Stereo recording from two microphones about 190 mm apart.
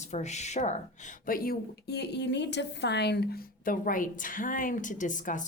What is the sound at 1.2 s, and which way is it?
Speech, 50° left (ahead or behind).